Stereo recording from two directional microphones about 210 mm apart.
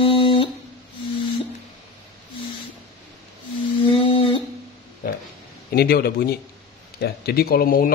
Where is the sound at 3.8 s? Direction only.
25° left (ahead or behind).